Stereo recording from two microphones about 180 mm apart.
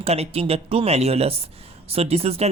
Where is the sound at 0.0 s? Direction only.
35° right (ahead or behind).